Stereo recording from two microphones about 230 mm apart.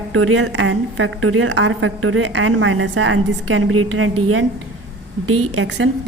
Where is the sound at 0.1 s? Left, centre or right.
Right.